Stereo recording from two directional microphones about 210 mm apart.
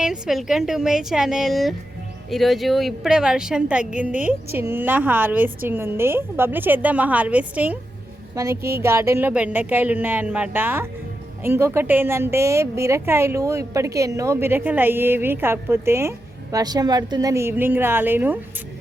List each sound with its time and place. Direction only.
0.0 s a woman's voice: centre (ahead or behind)